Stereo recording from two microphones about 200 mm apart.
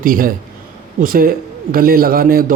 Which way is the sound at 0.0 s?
45° right (ahead or behind).